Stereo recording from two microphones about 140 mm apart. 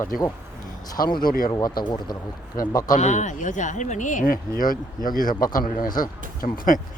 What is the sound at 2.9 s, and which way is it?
Speech, 55° left (ahead or behind).